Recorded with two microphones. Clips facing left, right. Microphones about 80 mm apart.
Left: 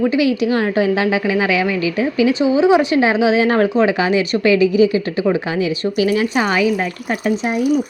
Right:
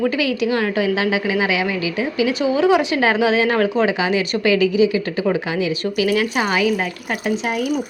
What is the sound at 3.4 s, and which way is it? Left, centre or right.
A woman's voice, left.